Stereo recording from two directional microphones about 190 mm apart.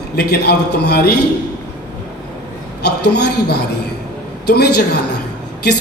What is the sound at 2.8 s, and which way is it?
A man's voice, 60° left (ahead or behind).